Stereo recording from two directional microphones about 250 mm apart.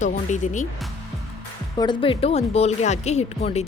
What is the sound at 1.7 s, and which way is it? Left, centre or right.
Speech, centre.